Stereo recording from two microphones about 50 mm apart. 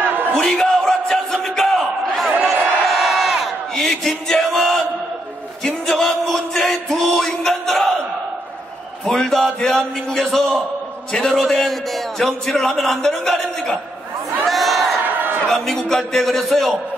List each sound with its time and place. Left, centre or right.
0.3 s battle cry: centre
2.8 s crowd: centre
3.7 s chant: centre
5.6 s music: centre
9.0 s a man's voice: centre
14.4 s crowd: centre
15.0 s crowd: right
15.4 s a man's voice: centre